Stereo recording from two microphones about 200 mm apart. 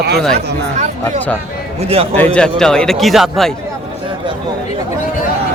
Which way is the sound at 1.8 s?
30° right (ahead or behind).